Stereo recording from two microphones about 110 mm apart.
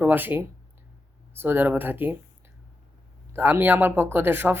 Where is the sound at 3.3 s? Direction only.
20° right (ahead or behind).